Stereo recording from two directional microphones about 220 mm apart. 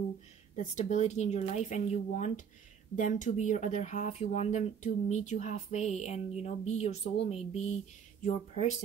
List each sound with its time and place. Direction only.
0.6 s speech: 30° left (ahead or behind)